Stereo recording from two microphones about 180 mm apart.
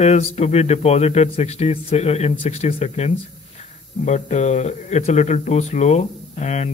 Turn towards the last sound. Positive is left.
turn(degrees=40)  # may be behind; listen again after turning